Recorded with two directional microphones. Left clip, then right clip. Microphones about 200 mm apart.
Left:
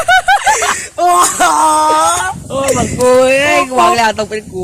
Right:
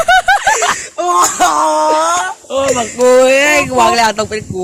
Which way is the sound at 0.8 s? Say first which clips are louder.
Left 2 dB; 45° left (ahead or behind).